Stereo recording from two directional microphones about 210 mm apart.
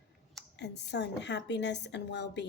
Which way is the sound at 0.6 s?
55° left (ahead or behind).